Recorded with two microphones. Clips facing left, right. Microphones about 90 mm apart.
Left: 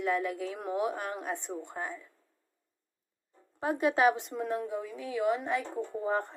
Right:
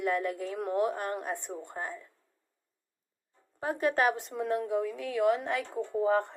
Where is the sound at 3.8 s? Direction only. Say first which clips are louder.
Left 2 dB; 10° left (ahead or behind).